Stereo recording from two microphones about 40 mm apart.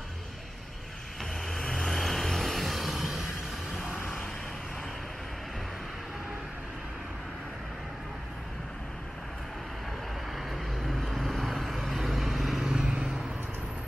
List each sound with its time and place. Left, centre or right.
1.7 s vehicle: centre
10.3 s vehicle: centre
12.7 s vehicle: centre